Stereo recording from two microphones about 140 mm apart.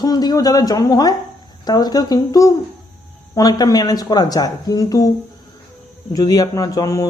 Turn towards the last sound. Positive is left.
turn(degrees=25)  # may be behind; listen again after turning